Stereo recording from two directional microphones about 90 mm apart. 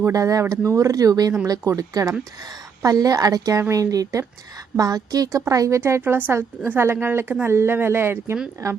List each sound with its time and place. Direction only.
0.0 s a woman's voice: 40° right (ahead or behind)